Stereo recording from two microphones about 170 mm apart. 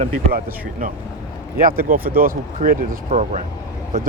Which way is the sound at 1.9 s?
55° right (ahead or behind).